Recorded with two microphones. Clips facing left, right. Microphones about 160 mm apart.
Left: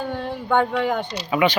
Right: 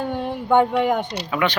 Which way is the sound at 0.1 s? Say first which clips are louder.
Right 3 dB; 15° right (ahead or behind).